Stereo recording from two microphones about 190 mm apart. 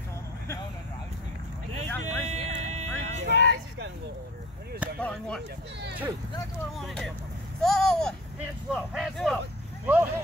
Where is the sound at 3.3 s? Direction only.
65° left (ahead or behind).